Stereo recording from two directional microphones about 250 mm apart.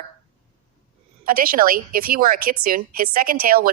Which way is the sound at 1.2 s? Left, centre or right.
Right.